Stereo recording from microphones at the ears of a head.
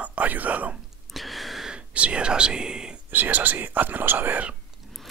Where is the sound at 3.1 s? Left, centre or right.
Right.